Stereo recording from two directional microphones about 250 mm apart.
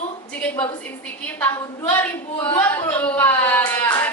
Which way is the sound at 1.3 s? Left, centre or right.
Centre.